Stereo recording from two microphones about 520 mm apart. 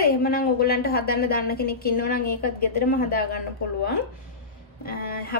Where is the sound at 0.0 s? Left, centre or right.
Centre.